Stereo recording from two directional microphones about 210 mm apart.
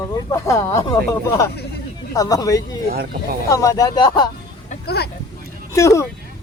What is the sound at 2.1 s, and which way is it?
Speech, 15° left (ahead or behind).